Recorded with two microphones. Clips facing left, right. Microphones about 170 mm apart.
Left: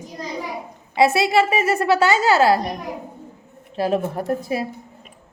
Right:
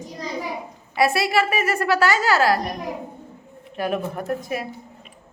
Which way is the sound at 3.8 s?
30° left (ahead or behind).